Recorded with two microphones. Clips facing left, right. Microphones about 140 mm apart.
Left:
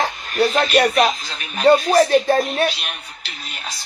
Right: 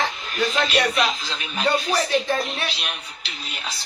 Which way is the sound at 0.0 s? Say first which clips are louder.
Left 5 dB; 40° left (ahead or behind).